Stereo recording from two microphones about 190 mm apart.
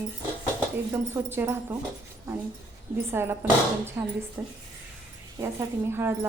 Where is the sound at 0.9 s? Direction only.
10° right (ahead or behind).